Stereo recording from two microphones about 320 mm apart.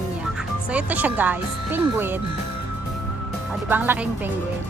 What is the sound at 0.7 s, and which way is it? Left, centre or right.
Speech, centre.